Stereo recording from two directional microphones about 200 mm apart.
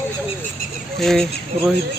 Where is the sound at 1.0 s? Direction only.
Centre (ahead or behind).